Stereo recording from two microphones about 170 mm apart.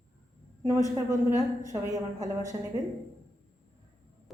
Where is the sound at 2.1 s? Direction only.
20° right (ahead or behind).